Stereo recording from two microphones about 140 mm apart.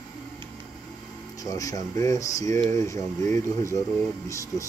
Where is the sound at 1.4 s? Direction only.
25° left (ahead or behind).